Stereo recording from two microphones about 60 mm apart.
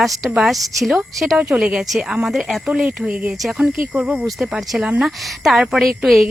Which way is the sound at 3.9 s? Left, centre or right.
Centre.